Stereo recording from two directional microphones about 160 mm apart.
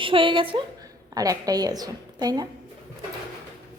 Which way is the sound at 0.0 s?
30° right (ahead or behind).